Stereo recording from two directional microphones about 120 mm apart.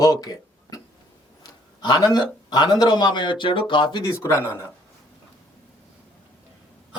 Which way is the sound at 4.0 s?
25° left (ahead or behind).